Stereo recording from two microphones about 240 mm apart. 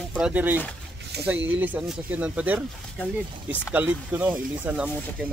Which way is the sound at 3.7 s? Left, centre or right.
Centre.